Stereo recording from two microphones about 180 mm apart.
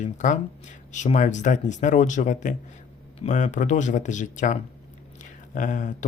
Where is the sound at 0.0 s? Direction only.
45° left (ahead or behind).